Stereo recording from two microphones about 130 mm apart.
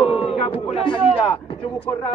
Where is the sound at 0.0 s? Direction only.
45° left (ahead or behind).